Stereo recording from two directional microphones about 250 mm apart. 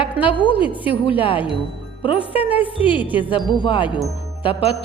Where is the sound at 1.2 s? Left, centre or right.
Centre.